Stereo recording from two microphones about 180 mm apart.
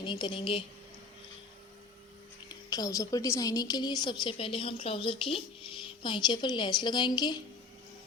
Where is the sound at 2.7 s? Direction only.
20° left (ahead or behind).